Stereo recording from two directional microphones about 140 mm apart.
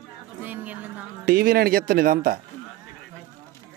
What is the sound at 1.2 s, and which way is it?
A man's voice, 90° right.